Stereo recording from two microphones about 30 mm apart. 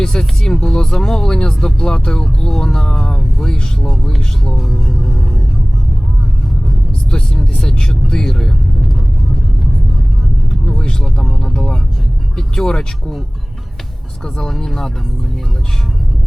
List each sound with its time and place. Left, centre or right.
0.0 s music: left
0.5 s a sound: centre
0.9 s speech: centre
4.5 s speech: centre
7.5 s speech: left
8.8 s vehicle: centre
11.5 s music: centre
12.4 s vehicle: centre